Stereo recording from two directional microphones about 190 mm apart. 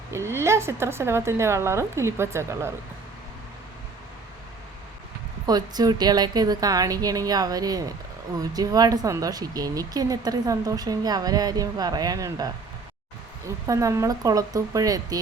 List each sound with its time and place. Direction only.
0.1 s a woman's voice: 15° right (ahead or behind)
5.5 s speech: 20° right (ahead or behind)
13.7 s speech: 15° right (ahead or behind)